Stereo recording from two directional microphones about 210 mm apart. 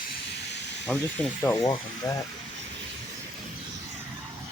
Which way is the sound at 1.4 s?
15° left (ahead or behind).